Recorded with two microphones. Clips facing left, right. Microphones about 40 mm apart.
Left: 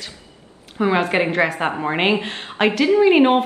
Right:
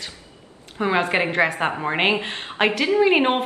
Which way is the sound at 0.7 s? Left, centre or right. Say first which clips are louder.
Left 2 dB; centre.